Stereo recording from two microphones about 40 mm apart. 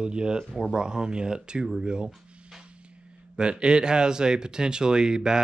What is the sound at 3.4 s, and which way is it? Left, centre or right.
Speech, right.